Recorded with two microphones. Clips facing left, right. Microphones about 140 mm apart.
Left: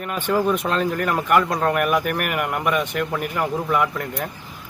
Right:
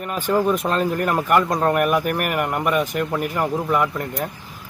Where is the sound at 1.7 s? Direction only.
5° right (ahead or behind).